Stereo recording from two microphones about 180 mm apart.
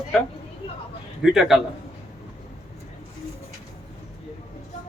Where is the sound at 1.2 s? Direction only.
Centre (ahead or behind).